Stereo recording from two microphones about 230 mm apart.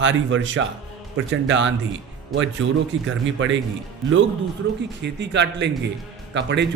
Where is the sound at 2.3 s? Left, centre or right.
Centre.